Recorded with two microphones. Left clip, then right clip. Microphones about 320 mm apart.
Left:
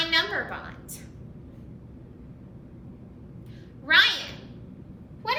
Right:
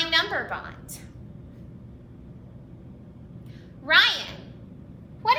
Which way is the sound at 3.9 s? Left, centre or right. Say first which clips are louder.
Right 1 dB; centre.